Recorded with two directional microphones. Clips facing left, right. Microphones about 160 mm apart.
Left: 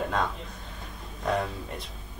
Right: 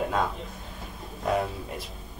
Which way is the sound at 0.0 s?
5° right (ahead or behind).